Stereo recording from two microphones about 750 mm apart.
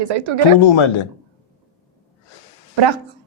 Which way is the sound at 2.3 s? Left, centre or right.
Left.